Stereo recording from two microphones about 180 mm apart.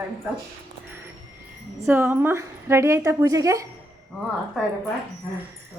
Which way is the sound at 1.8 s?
10° right (ahead or behind).